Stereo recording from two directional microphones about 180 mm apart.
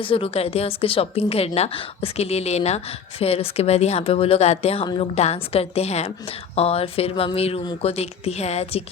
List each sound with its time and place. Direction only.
0.1 s a woman's voice: 30° left (ahead or behind)